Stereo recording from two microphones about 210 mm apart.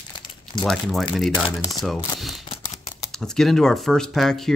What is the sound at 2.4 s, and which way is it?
Scissors, 15° left (ahead or behind).